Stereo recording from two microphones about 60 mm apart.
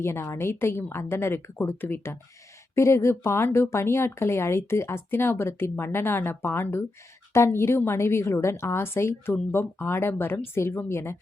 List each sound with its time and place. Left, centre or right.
0.0 s a woman's voice: left
2.7 s a woman's voice: left